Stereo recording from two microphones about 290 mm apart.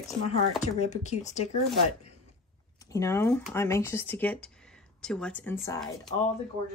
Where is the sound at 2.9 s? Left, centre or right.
Centre.